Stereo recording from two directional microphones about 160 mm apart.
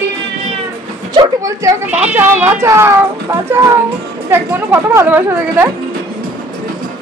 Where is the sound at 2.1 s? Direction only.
10° right (ahead or behind).